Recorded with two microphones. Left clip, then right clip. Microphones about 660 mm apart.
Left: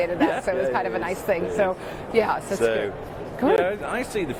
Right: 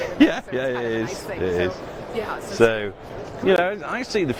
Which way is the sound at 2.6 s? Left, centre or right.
Right.